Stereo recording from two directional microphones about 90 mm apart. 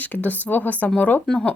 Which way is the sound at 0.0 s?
20° left (ahead or behind).